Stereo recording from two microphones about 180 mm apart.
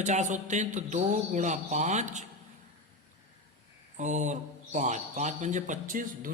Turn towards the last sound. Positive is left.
turn(degrees=-50)  # may be behind; listen again after turning